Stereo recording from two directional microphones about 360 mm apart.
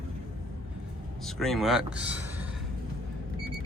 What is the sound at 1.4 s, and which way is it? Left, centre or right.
Speech, centre.